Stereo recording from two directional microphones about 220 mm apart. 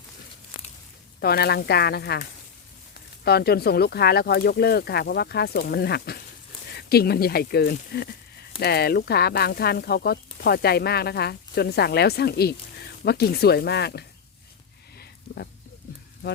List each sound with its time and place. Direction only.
1.2 s speech: 45° left (ahead or behind)